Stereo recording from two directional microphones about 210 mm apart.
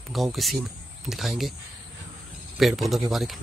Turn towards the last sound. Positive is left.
turn(degrees=0)  # may be behind; listen again after turning